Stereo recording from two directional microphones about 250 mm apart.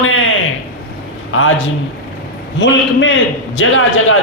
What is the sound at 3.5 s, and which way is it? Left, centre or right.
Speech, left.